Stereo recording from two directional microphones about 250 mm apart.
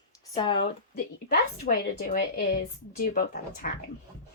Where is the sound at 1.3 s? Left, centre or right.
Left.